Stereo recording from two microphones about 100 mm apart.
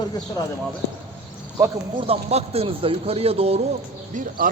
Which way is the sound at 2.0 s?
85° right.